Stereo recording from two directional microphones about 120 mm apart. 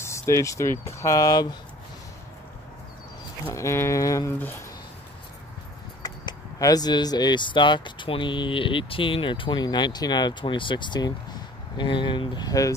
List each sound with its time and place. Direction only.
0.0 s speech: 25° left (ahead or behind)
3.4 s speech: 25° left (ahead or behind)
6.0 s speech: 35° left (ahead or behind)